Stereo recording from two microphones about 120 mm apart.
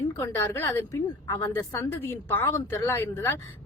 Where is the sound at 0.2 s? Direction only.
20° left (ahead or behind).